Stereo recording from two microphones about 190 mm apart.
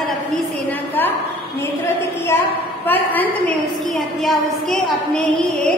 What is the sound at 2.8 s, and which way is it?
A woman's voice, 10° left (ahead or behind).